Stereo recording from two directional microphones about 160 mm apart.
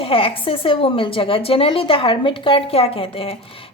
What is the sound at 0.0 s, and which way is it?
A woman's voice, 35° left (ahead or behind).